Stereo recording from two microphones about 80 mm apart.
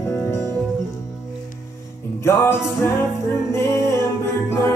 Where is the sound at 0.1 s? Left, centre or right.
Left.